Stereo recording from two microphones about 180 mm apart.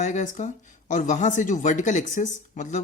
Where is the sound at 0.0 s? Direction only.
40° left (ahead or behind).